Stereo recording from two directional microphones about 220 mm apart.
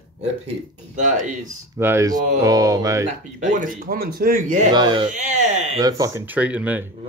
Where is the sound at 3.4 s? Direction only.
35° right (ahead or behind).